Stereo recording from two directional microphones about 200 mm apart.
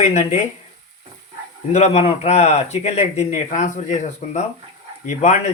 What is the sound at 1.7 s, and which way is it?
A man's voice, 35° left (ahead or behind).